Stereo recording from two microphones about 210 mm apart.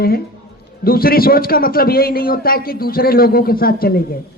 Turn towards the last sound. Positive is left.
turn(degrees=45)  # may be behind; listen again after turning